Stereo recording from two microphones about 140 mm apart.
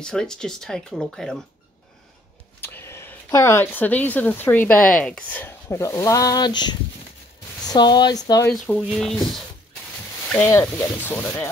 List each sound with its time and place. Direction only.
0.0 s speech: 5° left (ahead or behind)
2.6 s speech: 15° left (ahead or behind)
8.5 s speech: centre (ahead or behind)
10.3 s speech: 15° left (ahead or behind)